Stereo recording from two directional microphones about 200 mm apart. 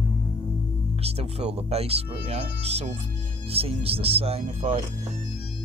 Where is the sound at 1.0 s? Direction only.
30° right (ahead or behind).